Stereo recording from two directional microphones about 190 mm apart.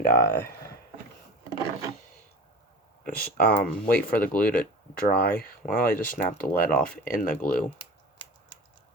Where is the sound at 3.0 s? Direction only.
55° left (ahead or behind).